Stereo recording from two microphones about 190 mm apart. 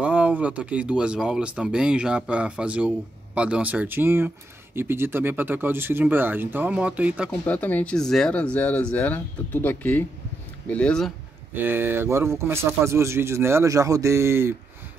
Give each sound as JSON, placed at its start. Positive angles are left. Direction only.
{"t": 0.0, "sound": "a man's voice", "side_deg": -5}
{"t": 7.4, "sound": "speech", "side_deg": 10}
{"t": 11.5, "sound": "a man's voice", "side_deg": -10}